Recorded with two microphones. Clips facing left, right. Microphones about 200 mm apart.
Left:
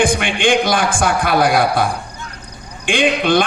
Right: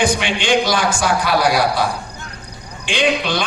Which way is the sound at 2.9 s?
55° left (ahead or behind).